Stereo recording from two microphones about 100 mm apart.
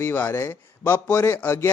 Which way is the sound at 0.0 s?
20° left (ahead or behind).